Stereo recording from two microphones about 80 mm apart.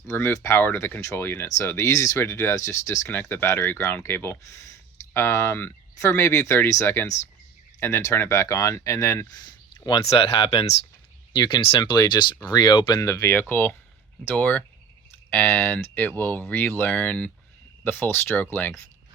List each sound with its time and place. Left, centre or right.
0.1 s speech: left
3.1 s speech: left
9.5 s a sound: left
11.3 s speech: left
13.0 s speech: left
13.5 s speech: left